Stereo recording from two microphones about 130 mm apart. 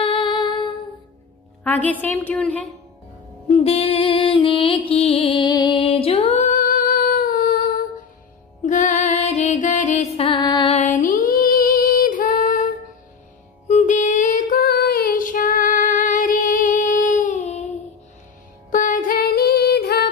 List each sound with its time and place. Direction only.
0.0 s humming: 40° left (ahead or behind)
1.6 s a woman's voice: 10° left (ahead or behind)
3.4 s music: 55° left (ahead or behind)
5.5 s music: 35° left (ahead or behind)
5.8 s music: 45° left (ahead or behind)
6.4 s humming: 85° left
8.6 s music: 75° left (ahead or behind); by 10.2 s 55° left (ahead or behind)
10.2 s music: 35° left (ahead or behind)
10.7 s female singing: 70° left (ahead or behind); by 12.6 s 90° left
13.7 s music: 65° left (ahead or behind); by 14.6 s 90° left
15.1 s female singing: 90° left; by 17.6 s 55° left (ahead or behind)
18.7 s music: 90° left